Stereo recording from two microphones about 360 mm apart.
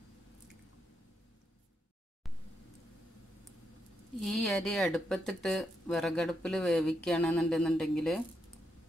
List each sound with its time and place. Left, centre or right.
4.2 s speech: centre